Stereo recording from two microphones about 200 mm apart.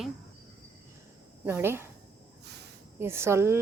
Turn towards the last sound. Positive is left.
turn(degrees=-15)  # may be behind; listen again after turning